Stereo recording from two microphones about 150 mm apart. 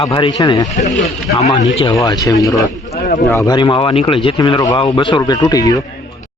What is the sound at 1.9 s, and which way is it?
A man's voice, 25° left (ahead or behind).